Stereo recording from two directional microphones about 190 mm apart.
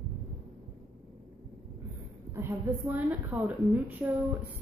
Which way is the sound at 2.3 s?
10° right (ahead or behind).